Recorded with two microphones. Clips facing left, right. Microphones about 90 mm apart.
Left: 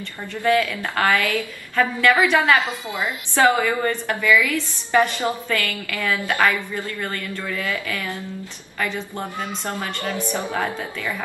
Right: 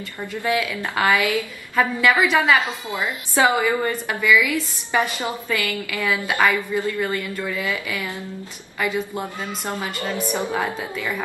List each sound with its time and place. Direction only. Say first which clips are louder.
0.3 s a woman's voice: left 4 dB; 10° right (ahead or behind)